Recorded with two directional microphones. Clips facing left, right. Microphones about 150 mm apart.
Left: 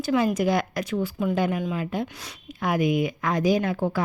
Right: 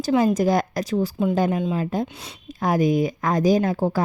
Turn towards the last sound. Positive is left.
turn(degrees=-40)  # may be behind; listen again after turning